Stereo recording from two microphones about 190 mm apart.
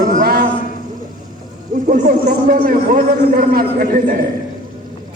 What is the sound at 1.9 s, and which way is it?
A man's voice, 45° right (ahead or behind).